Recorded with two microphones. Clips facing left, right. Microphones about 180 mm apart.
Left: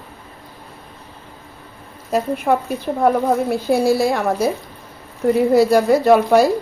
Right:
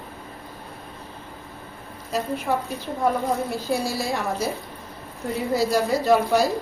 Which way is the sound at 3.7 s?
60° left (ahead or behind).